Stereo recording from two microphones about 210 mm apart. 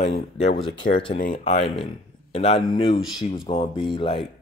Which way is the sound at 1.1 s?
40° left (ahead or behind).